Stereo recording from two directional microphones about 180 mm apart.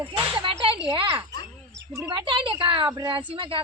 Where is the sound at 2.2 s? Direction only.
25° right (ahead or behind).